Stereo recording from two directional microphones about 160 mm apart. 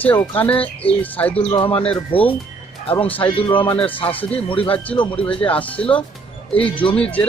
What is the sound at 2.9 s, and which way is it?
Speech, 10° left (ahead or behind).